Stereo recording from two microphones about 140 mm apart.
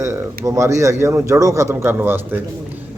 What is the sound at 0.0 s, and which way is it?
A man's voice, 20° right (ahead or behind).